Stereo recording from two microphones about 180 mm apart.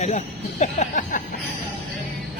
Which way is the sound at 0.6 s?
45° left (ahead or behind).